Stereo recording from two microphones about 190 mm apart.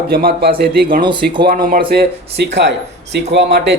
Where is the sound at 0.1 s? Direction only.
55° right (ahead or behind).